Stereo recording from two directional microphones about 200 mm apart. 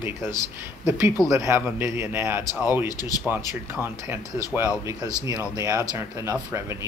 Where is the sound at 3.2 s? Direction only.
10° right (ahead or behind).